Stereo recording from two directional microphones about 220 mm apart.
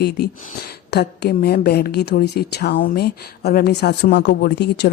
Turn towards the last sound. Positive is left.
turn(degrees=50)  # may be behind; listen again after turning